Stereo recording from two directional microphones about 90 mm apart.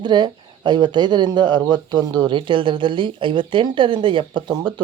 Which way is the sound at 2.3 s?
65° right (ahead or behind).